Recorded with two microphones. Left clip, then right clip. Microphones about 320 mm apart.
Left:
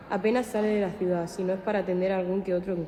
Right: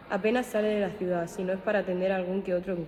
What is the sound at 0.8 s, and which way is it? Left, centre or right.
A woman's voice, right.